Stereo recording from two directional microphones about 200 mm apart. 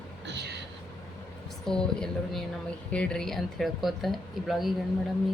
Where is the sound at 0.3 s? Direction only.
55° right (ahead or behind).